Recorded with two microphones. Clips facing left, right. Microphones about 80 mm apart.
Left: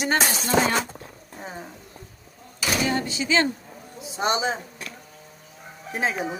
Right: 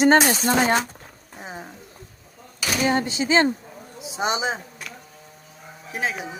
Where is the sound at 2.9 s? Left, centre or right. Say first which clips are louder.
Right 3 dB; right.